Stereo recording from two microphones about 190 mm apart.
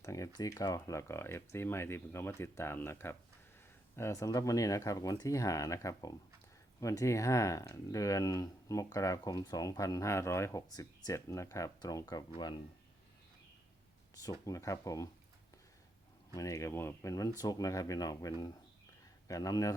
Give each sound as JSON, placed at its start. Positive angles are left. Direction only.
{"t": 0.0, "sound": "speech", "side_deg": 15}
{"t": 14.2, "sound": "speech", "side_deg": 15}
{"t": 16.3, "sound": "speech", "side_deg": 15}